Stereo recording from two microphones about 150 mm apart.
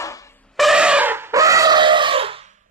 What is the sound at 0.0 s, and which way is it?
Brass instrument, 20° left (ahead or behind).